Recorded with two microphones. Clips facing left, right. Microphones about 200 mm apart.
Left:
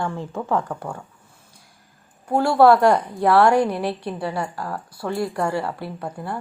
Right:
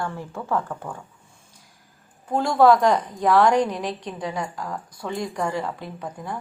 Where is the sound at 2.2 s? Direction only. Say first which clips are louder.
Left 2 dB; 10° left (ahead or behind).